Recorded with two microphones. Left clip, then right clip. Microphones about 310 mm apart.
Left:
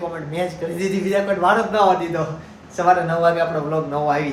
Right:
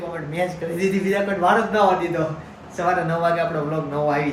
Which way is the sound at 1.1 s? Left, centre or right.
Centre.